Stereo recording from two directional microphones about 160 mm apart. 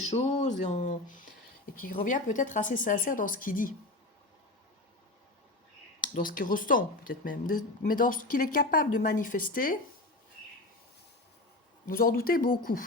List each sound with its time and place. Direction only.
0.0 s speech: 45° left (ahead or behind); by 3.8 s 60° left (ahead or behind)
6.1 s speech: 60° left (ahead or behind)
11.9 s speech: 60° left (ahead or behind)